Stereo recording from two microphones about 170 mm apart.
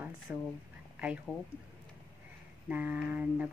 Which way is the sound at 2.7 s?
10° right (ahead or behind).